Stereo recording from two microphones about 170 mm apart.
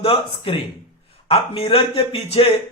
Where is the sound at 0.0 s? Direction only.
35° left (ahead or behind).